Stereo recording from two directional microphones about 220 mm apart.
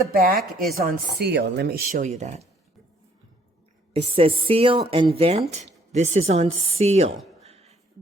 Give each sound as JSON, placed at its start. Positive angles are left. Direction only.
{"t": 0.1, "sound": "speech", "side_deg": -40}
{"t": 0.3, "sound": "speech", "side_deg": 0}
{"t": 0.7, "sound": "speech", "side_deg": -40}
{"t": 3.9, "sound": "speech", "side_deg": -25}
{"t": 7.4, "sound": "beatboxing", "side_deg": -30}